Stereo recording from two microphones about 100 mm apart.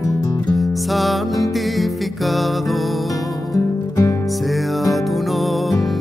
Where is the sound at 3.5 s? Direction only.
35° left (ahead or behind).